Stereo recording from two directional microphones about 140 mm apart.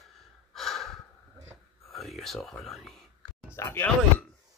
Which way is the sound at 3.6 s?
20° left (ahead or behind).